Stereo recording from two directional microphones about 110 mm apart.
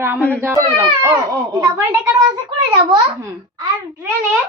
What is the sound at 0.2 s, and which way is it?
Speech, 15° left (ahead or behind).